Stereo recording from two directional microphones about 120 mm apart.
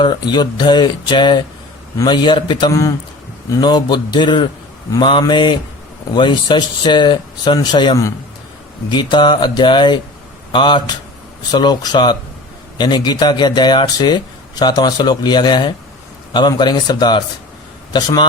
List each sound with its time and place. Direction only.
0.0 s speech: 40° left (ahead or behind)